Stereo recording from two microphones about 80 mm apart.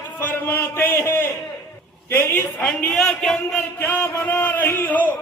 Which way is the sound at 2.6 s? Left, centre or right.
Centre.